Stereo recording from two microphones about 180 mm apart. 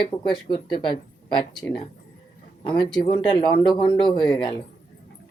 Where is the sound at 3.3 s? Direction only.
25° left (ahead or behind).